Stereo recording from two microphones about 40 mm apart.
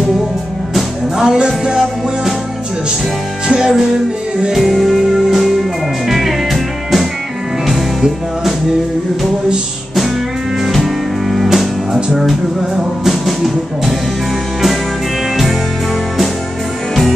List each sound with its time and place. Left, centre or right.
1.1 s music: centre
3.4 s music: centre
4.5 s music: centre
10.6 s music: centre